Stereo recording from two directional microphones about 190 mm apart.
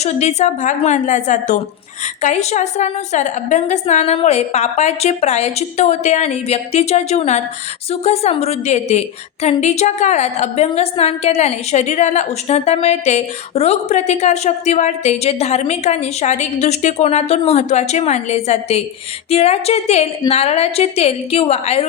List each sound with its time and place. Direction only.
0.0 s a woman's voice: 35° left (ahead or behind)